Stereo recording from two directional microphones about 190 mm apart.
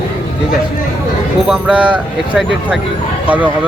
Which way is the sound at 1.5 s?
5° right (ahead or behind).